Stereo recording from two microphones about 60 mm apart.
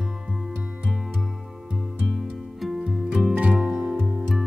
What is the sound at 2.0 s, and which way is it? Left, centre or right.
Music, centre.